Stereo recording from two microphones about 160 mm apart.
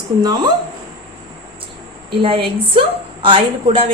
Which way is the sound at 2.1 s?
35° right (ahead or behind).